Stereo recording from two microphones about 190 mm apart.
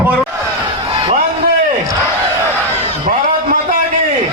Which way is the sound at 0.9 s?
30° right (ahead or behind).